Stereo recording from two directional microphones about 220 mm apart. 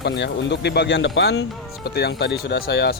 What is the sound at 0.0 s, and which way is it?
Speech, 50° left (ahead or behind).